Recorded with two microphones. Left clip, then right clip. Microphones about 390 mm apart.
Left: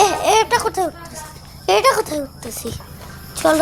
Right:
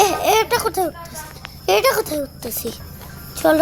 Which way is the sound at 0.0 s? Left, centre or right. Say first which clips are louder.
Left 1 dB; right.